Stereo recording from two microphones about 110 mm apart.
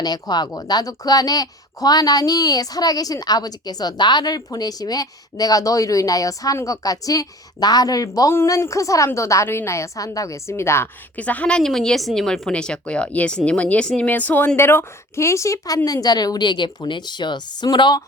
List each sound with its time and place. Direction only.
0.0 s speech: 40° left (ahead or behind)